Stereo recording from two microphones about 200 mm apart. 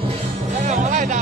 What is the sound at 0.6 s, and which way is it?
Music, 35° right (ahead or behind).